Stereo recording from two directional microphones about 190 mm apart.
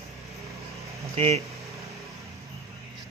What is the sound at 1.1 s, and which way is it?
Speech, 30° right (ahead or behind).